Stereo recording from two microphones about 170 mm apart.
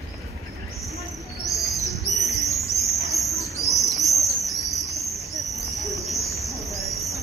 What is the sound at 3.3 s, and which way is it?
Bird, 20° left (ahead or behind).